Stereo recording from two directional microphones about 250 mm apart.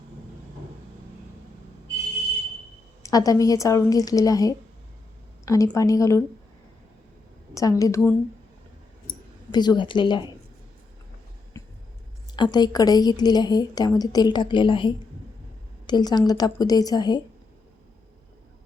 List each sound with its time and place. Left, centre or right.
3.0 s a woman's voice: centre
7.5 s a woman's voice: centre
11.6 s a sound: centre
12.4 s a woman's voice: centre